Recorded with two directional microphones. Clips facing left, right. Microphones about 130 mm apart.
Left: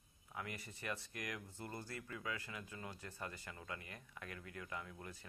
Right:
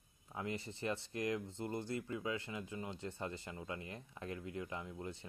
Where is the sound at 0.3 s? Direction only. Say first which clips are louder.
Right 6 dB; 25° right (ahead or behind).